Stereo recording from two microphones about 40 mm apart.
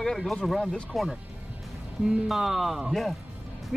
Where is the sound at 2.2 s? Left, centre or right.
Centre.